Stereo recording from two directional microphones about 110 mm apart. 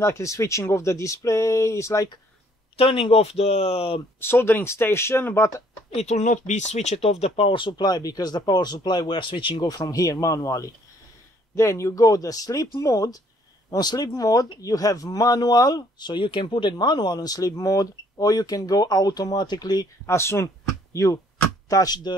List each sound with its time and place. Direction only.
0.0 s speech: 25° left (ahead or behind)
2.8 s speech: 60° left (ahead or behind)
4.2 s speech: 20° left (ahead or behind)
5.9 s speech: 90° left; by 9.7 s 50° left (ahead or behind)
9.7 s speech: 35° left (ahead or behind)
20.1 s speech: 25° left (ahead or behind); by 22.1 s 40° left (ahead or behind)